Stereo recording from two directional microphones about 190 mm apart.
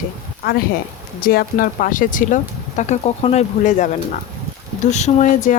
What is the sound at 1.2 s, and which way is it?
Speech, 50° left (ahead or behind).